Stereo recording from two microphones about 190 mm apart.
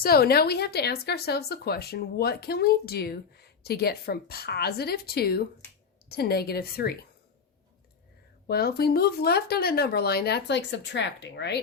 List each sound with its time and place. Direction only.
0.0 s speech: 55° left (ahead or behind)
8.4 s speech: 55° left (ahead or behind)